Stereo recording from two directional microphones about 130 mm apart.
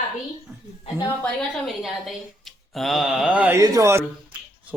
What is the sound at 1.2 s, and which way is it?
A woman's voice, 5° left (ahead or behind).